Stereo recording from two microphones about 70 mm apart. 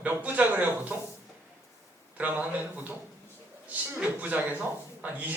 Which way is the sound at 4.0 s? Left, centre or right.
Right.